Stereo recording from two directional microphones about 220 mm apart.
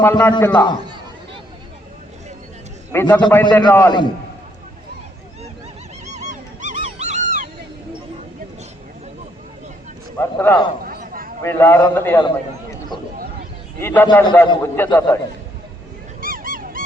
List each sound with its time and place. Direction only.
0.0 s a man's voice: 10° left (ahead or behind)
2.9 s a man's voice: 10° left (ahead or behind)
3.2 s a man's voice: 20° left (ahead or behind)
6.1 s dog: 35° right (ahead or behind)
10.2 s a man's voice: 10° left (ahead or behind)
10.8 s a sound: 40° right (ahead or behind)
11.4 s a man's voice: 10° left (ahead or behind)
13.7 s a man's voice: 10° left (ahead or behind)
16.2 s honk: 40° right (ahead or behind)